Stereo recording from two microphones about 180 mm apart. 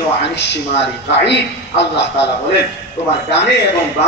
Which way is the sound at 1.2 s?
75° left (ahead or behind).